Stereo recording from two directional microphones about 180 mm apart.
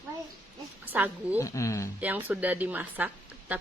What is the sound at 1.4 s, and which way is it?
Speech, 15° left (ahead or behind).